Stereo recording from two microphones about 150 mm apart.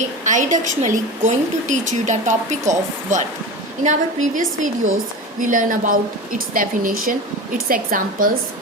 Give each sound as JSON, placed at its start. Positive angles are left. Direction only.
{"t": 0.3, "sound": "a woman's voice", "side_deg": -55}